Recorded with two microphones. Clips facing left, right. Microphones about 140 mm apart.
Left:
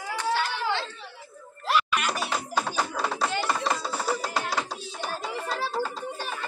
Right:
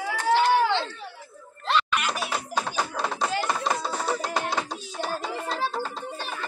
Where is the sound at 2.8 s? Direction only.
5° left (ahead or behind).